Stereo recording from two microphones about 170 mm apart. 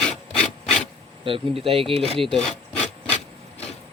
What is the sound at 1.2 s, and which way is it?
Speech, 30° right (ahead or behind).